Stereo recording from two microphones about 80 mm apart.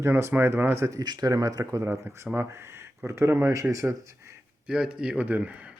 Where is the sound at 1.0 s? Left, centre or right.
Right.